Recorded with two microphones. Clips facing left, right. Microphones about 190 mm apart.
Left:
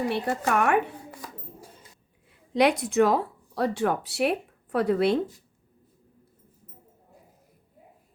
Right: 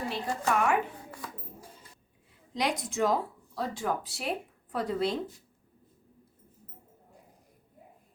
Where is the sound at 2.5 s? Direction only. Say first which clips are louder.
Left 9 dB; 65° left (ahead or behind).